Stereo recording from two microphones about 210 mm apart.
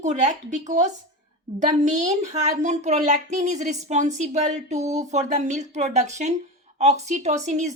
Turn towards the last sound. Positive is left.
turn(degrees=-35)  # may be behind; listen again after turning